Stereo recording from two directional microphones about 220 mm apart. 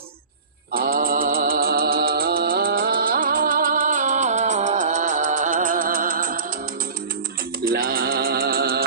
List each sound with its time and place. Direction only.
0.7 s music: 40° right (ahead or behind)
7.6 s music: 40° right (ahead or behind)